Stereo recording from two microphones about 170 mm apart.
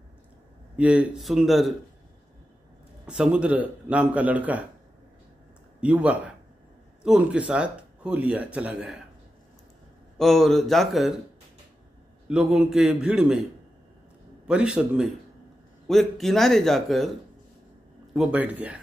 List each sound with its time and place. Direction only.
0.7 s a man's voice: 5° right (ahead or behind)
3.1 s speech: 5° right (ahead or behind)
5.8 s speech: 5° right (ahead or behind)
10.1 s a man's voice: centre (ahead or behind)
12.3 s a man's voice: 5° right (ahead or behind)
14.5 s a man's voice: 5° right (ahead or behind)
18.1 s speech: 5° right (ahead or behind)